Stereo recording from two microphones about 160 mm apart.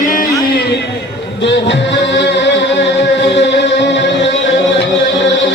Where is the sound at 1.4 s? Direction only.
90° left.